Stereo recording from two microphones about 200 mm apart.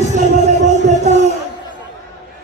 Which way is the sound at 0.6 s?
35° right (ahead or behind).